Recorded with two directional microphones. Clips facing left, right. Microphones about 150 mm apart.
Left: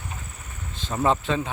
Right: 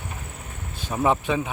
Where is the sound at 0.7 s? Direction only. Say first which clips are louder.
Right 1 dB; 10° right (ahead or behind).